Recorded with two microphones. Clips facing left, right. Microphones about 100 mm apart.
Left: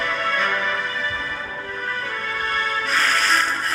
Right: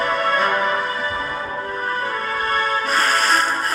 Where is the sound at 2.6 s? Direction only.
45° right (ahead or behind).